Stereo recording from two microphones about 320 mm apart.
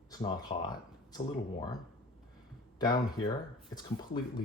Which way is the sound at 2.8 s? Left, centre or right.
Centre.